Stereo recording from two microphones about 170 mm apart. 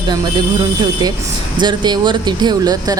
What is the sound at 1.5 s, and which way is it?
Speech, 25° right (ahead or behind).